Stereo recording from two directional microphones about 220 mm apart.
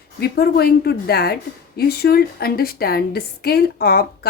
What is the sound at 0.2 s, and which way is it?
A woman's voice, 45° left (ahead or behind).